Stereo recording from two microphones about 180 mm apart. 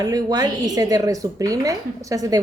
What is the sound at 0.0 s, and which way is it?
Speech, 20° right (ahead or behind).